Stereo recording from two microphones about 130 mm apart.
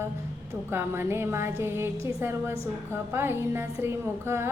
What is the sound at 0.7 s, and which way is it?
A woman's voice, 20° right (ahead or behind).